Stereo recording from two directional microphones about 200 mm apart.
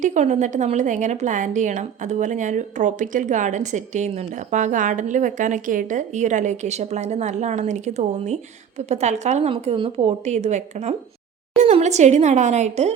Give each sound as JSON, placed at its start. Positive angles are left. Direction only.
{"t": 0.0, "sound": "a woman's voice", "side_deg": -35}